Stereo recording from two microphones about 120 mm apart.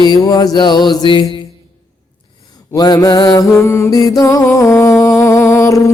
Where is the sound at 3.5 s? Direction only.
25° left (ahead or behind).